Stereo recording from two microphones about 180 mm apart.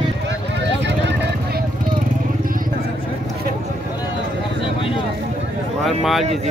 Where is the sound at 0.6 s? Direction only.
75° right (ahead or behind).